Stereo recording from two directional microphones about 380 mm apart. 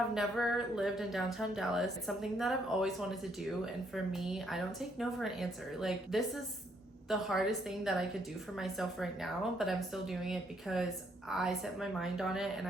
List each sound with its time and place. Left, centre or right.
0.1 s speech: centre
3.9 s speech: centre